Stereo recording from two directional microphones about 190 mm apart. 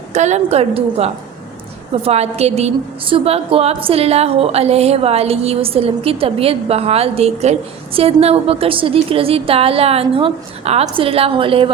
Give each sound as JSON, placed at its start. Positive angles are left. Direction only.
{"t": 0.1, "sound": "a woman's voice", "side_deg": -40}